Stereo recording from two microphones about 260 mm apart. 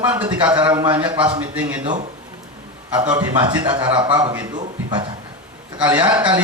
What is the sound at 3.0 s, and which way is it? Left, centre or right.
A man's voice, centre.